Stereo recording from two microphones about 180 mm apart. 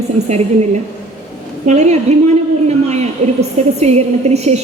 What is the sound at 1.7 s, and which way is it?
A woman's voice, 40° right (ahead or behind).